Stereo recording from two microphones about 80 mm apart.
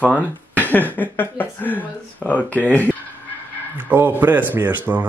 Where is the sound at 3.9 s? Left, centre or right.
Right.